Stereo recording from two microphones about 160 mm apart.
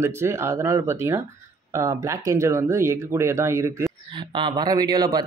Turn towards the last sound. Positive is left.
turn(degrees=-25)  # may be behind; listen again after turning